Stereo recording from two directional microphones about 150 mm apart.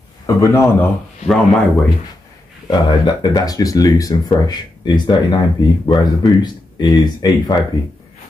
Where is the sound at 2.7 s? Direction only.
30° left (ahead or behind).